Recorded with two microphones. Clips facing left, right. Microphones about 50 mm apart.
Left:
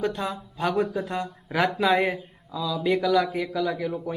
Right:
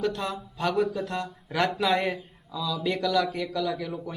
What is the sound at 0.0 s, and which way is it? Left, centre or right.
Speech, centre.